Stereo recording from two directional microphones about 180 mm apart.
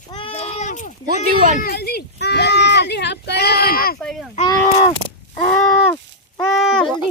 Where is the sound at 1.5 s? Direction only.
60° left (ahead or behind).